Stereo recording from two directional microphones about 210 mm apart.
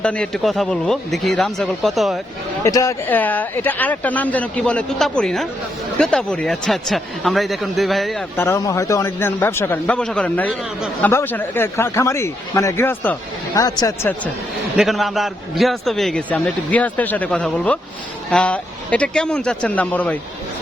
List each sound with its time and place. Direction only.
0.0 s a man's voice: 5° left (ahead or behind)
2.6 s a man's voice: 15° left (ahead or behind)
8.4 s speech: 10° left (ahead or behind)
14.8 s a man's voice: centre (ahead or behind)